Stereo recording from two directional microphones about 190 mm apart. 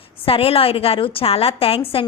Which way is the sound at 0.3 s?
30° left (ahead or behind).